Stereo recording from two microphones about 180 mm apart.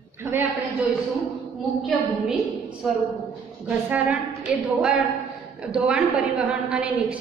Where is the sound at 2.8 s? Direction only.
Centre (ahead or behind).